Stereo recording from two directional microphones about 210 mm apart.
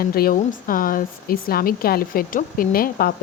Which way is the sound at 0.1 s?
45° left (ahead or behind).